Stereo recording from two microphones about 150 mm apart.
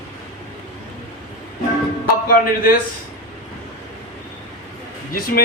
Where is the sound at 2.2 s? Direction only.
75° left (ahead or behind).